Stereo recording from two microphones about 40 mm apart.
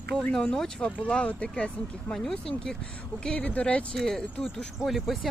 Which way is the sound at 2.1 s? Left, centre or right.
Centre.